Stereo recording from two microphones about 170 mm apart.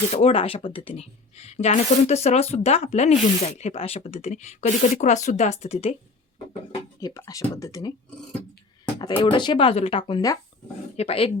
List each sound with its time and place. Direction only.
0.1 s speech: 35° left (ahead or behind)
7.0 s speech: 20° left (ahead or behind)
9.0 s speech: 25° left (ahead or behind)
10.9 s speech: 35° left (ahead or behind)